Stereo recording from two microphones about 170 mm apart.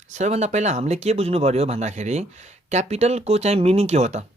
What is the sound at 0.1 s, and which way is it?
Speech, 45° right (ahead or behind).